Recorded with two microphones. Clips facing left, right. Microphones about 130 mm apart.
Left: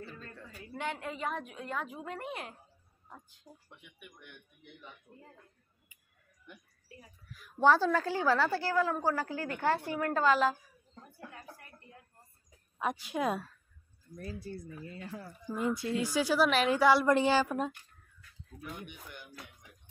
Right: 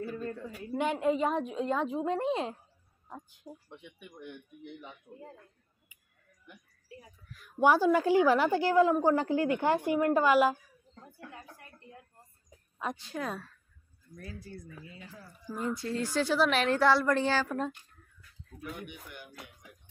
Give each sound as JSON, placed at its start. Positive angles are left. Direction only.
{"t": 0.7, "sound": "a woman's voice", "side_deg": -20}
{"t": 3.6, "sound": "a woman's voice", "side_deg": -25}
{"t": 7.5, "sound": "a woman's voice", "side_deg": -15}
{"t": 11.3, "sound": "a sound", "side_deg": -20}
{"t": 12.7, "sound": "speech", "side_deg": 10}
{"t": 14.1, "sound": "speech", "side_deg": 35}
{"t": 15.0, "sound": "speech", "side_deg": 60}
{"t": 15.4, "sound": "speech", "side_deg": 15}